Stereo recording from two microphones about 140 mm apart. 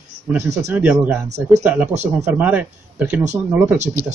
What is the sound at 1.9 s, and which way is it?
Speech, 55° right (ahead or behind).